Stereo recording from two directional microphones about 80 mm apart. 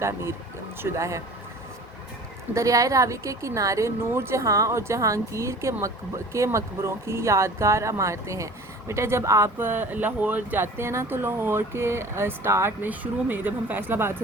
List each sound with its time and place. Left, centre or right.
0.0 s speech: right
2.6 s speech: right
12.8 s speech: right